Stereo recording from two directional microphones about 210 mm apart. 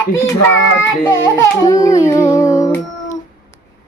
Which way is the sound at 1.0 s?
15° left (ahead or behind).